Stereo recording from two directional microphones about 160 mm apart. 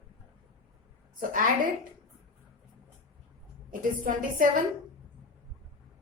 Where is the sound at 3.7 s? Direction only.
60° right (ahead or behind).